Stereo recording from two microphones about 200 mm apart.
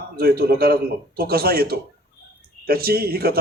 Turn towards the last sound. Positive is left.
turn(degrees=-50)  # may be behind; listen again after turning